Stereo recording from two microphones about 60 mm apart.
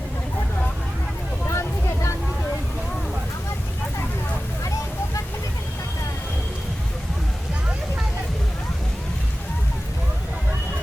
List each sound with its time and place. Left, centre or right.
1.5 s vehicle: left